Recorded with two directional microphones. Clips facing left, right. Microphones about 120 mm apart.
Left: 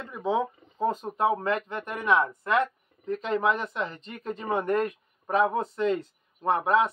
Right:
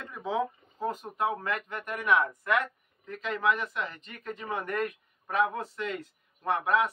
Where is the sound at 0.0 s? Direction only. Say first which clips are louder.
Left 4 dB; 20° left (ahead or behind).